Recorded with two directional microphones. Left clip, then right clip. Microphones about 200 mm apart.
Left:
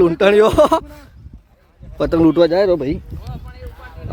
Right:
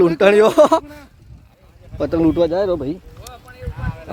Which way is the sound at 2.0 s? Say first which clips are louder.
Left 3 dB; 15° left (ahead or behind).